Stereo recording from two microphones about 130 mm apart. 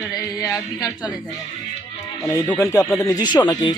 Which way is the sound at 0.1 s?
25° left (ahead or behind).